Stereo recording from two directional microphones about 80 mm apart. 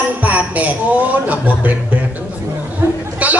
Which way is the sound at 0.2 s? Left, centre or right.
Centre.